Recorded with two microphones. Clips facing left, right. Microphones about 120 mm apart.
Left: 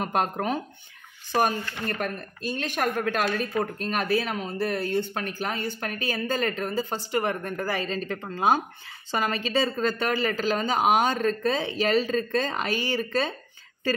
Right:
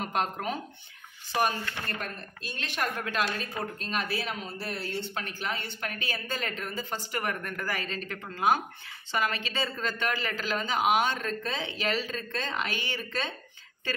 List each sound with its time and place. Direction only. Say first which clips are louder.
0.0 s a woman's voice: left 4 dB; 45° left (ahead or behind)
2.0 s a woman's voice: left 7 dB; 50° left (ahead or behind)